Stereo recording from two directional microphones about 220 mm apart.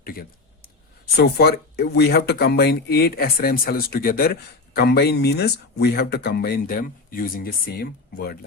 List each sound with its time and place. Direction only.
0.0 s speech: 40° left (ahead or behind)